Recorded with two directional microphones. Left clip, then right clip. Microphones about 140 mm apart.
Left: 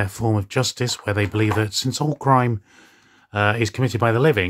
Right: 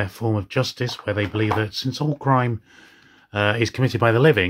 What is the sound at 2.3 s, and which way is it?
Speech, 35° left (ahead or behind).